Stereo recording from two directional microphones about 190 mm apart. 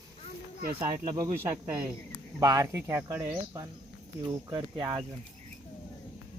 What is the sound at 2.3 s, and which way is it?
Speech, 20° right (ahead or behind).